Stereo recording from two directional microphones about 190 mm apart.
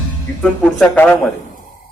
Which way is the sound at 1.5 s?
45° left (ahead or behind).